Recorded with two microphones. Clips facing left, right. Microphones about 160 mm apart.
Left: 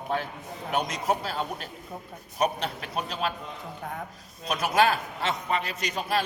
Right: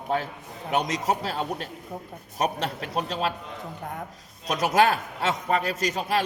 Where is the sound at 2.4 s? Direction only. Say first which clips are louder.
Even; 40° right (ahead or behind).